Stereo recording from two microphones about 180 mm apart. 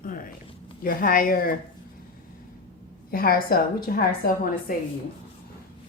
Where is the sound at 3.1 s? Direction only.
55° left (ahead or behind).